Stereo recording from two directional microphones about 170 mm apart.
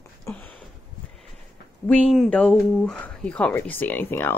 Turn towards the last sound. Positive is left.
turn(degrees=10)  # may be behind; listen again after turning